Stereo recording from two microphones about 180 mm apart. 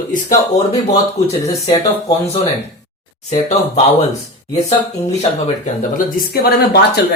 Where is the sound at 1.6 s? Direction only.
35° left (ahead or behind).